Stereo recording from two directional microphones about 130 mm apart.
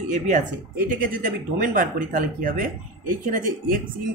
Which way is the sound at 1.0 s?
90° right.